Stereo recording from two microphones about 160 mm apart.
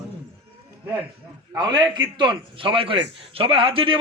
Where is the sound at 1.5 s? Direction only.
25° right (ahead or behind).